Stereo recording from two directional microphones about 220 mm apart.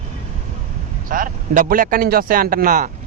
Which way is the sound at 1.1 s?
35° right (ahead or behind).